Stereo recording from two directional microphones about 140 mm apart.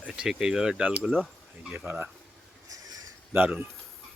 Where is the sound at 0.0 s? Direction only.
5° right (ahead or behind).